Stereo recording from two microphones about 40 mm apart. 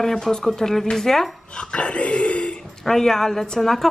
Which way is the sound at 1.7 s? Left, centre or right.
Left.